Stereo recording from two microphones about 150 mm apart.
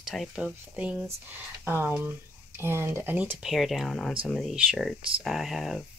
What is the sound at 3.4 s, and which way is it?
Speech, centre (ahead or behind).